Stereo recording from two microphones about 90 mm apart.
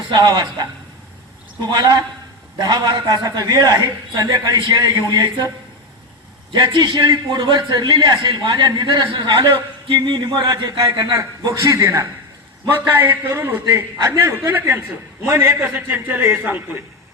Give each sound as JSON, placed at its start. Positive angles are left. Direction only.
{"t": 0.1, "sound": "a man's voice", "side_deg": -50}
{"t": 6.5, "sound": "a man's voice", "side_deg": -55}
{"t": 13.0, "sound": "a man's voice", "side_deg": -25}